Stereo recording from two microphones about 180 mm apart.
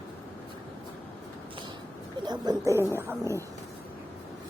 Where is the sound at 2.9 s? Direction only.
15° right (ahead or behind).